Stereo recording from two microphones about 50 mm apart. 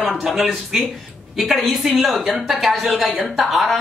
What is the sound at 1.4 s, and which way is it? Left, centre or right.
A man's voice, centre.